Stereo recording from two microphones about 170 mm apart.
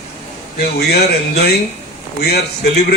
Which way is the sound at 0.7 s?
70° left (ahead or behind).